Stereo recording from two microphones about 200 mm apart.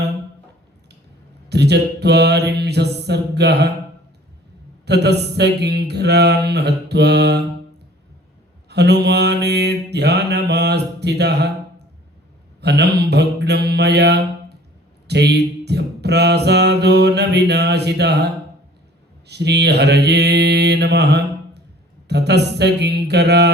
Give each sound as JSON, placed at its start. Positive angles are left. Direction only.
{"t": 1.5, "sound": "mantra", "side_deg": -55}
{"t": 4.9, "sound": "mantra", "side_deg": -55}
{"t": 8.7, "sound": "mantra", "side_deg": -55}
{"t": 12.6, "sound": "mantra", "side_deg": -55}
{"t": 19.3, "sound": "mantra", "side_deg": -55}